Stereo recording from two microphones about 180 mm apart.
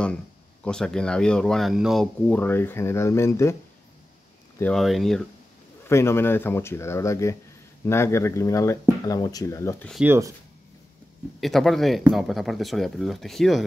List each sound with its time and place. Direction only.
0.7 s speech: 5° left (ahead or behind)
4.6 s speech: 5° left (ahead or behind)
5.9 s speech: 15° left (ahead or behind)
10.0 s speech: 15° right (ahead or behind)
11.4 s speech: centre (ahead or behind)